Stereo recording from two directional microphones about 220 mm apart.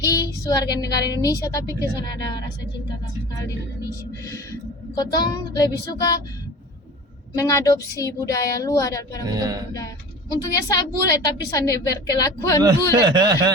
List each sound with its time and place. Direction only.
0.0 s female singing: 15° left (ahead or behind)
0.8 s a woman's voice: 15° left (ahead or behind)
4.9 s a woman's voice: 15° left (ahead or behind)
7.3 s a woman's voice: 15° left (ahead or behind)
9.3 s speech: 15° right (ahead or behind)
10.4 s a woman's voice: 15° left (ahead or behind)
12.9 s speech: 15° right (ahead or behind)